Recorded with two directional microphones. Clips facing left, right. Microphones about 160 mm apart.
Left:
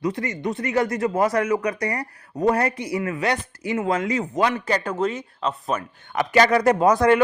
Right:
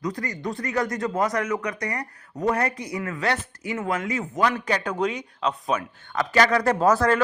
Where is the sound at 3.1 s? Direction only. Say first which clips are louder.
Even; 15° left (ahead or behind).